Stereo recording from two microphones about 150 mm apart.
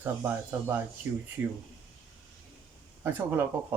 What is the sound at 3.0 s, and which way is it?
Speech, 15° right (ahead or behind).